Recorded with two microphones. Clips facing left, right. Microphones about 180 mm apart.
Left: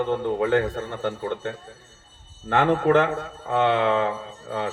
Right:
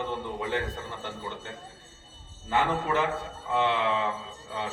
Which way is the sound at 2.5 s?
60° left (ahead or behind).